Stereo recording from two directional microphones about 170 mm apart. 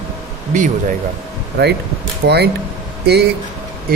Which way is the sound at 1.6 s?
75° right (ahead or behind).